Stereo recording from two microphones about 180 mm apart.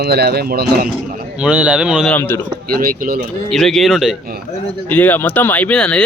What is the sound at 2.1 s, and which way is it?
Speech, 15° left (ahead or behind).